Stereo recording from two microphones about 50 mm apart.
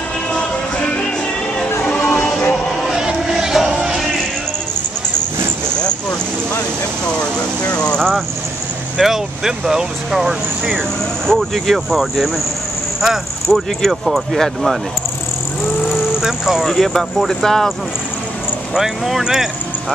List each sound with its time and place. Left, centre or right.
0.3 s music: left
1.8 s music: left
2.5 s a sound: centre
3.0 s a sound: centre
7.7 s vehicle: centre
9.0 s speech: centre
11.2 s speech: centre
16.2 s vehicle: centre
16.6 s speech: centre
18.8 s speech: centre